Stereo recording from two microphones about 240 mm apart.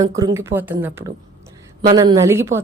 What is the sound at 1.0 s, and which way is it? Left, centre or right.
Speech, right.